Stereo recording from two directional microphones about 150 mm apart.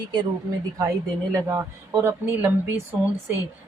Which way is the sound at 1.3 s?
20° right (ahead or behind).